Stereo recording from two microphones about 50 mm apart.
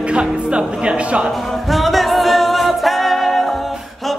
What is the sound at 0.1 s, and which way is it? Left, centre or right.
Speech, right.